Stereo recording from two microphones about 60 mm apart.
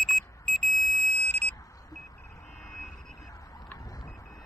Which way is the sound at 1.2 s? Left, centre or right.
Left.